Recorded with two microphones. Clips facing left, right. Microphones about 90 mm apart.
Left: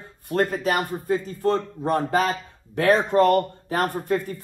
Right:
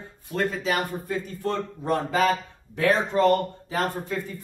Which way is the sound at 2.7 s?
60° left (ahead or behind).